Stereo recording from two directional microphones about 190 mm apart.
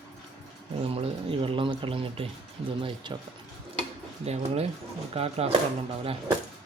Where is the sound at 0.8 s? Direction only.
30° right (ahead or behind).